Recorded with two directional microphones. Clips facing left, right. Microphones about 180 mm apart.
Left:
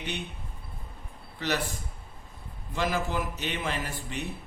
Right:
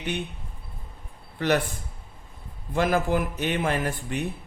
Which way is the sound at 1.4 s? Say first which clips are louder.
Right 7 dB; 55° right (ahead or behind).